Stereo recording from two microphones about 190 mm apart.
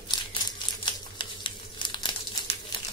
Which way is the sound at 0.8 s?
25° left (ahead or behind).